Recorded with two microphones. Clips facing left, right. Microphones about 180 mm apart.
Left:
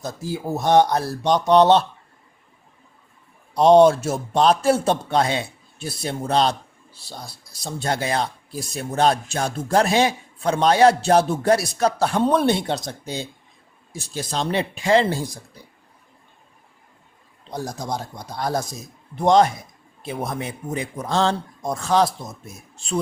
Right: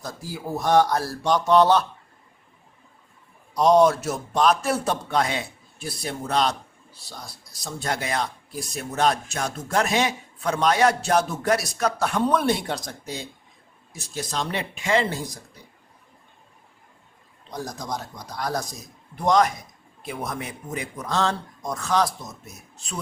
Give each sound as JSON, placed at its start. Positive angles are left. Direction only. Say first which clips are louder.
{"t": 0.0, "sound": "speech", "louder": "left 5 dB", "side_deg": 25}
{"t": 3.5, "sound": "speech", "louder": "left 4 dB", "side_deg": 30}
{"t": 17.5, "sound": "speech", "louder": "left 3 dB", "side_deg": 30}